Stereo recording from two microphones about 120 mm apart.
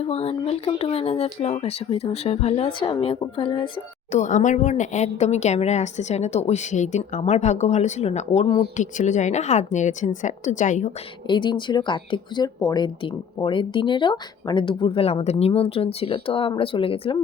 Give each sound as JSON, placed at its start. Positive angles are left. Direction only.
{"t": 0.0, "sound": "speech", "side_deg": 55}
{"t": 4.1, "sound": "a woman's voice", "side_deg": 85}
{"t": 8.7, "sound": "a woman's voice", "side_deg": 90}
{"t": 11.3, "sound": "speech", "side_deg": 40}